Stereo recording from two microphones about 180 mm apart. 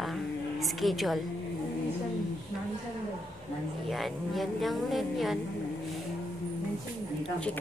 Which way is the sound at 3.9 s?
Centre (ahead or behind).